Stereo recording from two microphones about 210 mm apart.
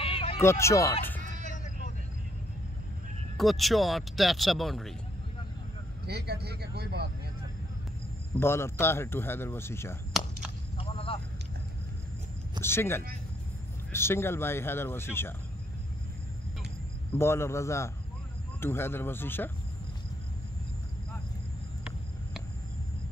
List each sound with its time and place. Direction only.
0.0 s music: 25° left (ahead or behind)
0.4 s speech: 15° left (ahead or behind)
1.3 s vehicle: 35° right (ahead or behind)
3.3 s speech: centre (ahead or behind)
6.0 s speech: 50° right (ahead or behind)
8.4 s speech: 10° left (ahead or behind)
10.1 s a sound: centre (ahead or behind)
10.8 s vehicle: 25° left (ahead or behind)
12.6 s speech: 10° left (ahead or behind)
17.2 s speech: 10° left (ahead or behind)